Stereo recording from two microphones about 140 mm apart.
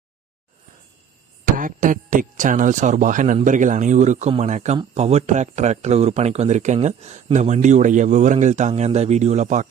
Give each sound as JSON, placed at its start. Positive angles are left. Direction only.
{"t": 1.5, "sound": "speech", "side_deg": -75}